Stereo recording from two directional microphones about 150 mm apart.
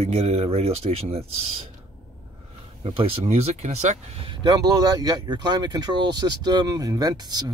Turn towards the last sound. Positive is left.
turn(degrees=-25)  # may be behind; listen again after turning